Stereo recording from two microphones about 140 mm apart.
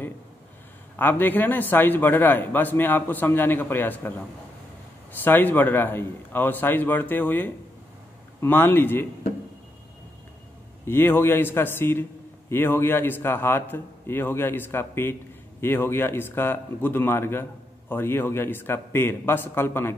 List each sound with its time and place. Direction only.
0.9 s speech: 15° left (ahead or behind)
5.2 s speech: 15° left (ahead or behind)
10.9 s speech: 15° left (ahead or behind)